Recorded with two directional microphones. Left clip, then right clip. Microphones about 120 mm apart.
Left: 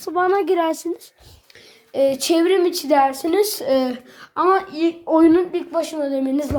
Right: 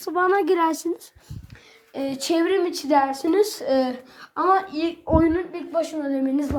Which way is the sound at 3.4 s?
35° left (ahead or behind).